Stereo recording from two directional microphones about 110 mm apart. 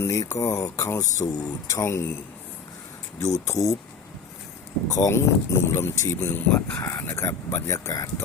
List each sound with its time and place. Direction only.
0.0 s speech: 25° left (ahead or behind)
4.9 s speech: 25° left (ahead or behind)